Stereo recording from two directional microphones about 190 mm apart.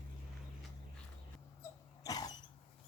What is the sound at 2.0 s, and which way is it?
Creak, 20° left (ahead or behind).